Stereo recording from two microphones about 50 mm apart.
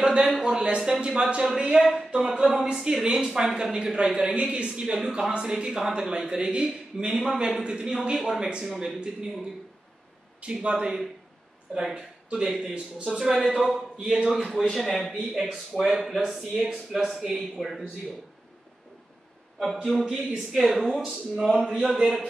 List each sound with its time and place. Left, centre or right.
0.0 s a sound: right
0.4 s a man's voice: centre
10.4 s a man's voice: centre
12.3 s a man's voice: centre
13.3 s speech: centre
19.6 s a man's voice: centre
20.8 s speech: centre
21.1 s speech: centre